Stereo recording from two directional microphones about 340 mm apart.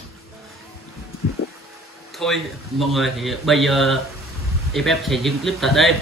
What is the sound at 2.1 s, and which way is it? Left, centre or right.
A man's voice, centre.